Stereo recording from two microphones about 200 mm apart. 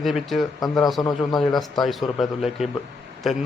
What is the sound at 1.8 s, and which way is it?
Speech, centre (ahead or behind).